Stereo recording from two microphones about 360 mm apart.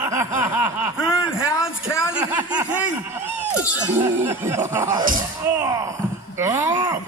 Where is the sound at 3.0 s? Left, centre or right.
Centre.